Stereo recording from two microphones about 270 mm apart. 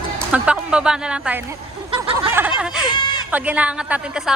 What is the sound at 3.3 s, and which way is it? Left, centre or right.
Speech, centre.